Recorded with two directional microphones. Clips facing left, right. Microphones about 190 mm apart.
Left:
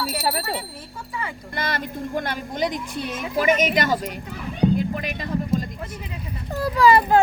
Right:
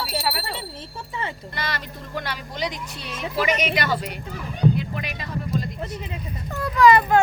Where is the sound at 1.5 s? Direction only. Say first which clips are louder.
Left 8 dB; 50° left (ahead or behind).